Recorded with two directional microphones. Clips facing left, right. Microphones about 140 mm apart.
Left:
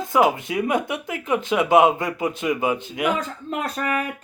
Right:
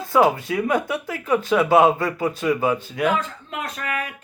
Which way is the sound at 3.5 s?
35° left (ahead or behind).